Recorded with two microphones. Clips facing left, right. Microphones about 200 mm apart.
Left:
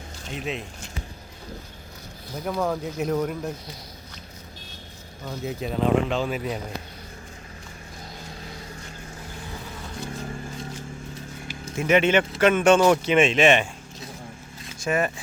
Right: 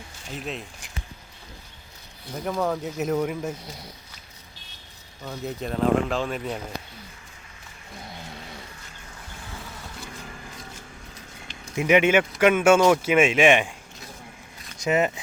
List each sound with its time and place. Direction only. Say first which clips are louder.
0.3 s speech: left 2 dB; centre (ahead or behind)
2.4 s speech: even; centre (ahead or behind)
5.2 s speech: left 1 dB; centre (ahead or behind)
11.8 s speech: right 1 dB; 15° right (ahead or behind)
14.8 s speech: right 2 dB; 20° right (ahead or behind)